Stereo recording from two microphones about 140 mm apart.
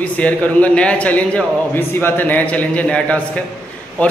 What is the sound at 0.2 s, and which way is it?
A man's voice, 10° left (ahead or behind).